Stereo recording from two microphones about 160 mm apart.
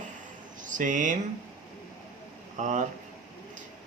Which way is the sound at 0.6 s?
55° right (ahead or behind).